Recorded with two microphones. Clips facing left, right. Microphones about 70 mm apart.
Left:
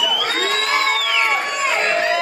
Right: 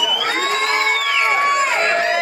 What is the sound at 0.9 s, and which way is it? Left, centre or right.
Crowd, right.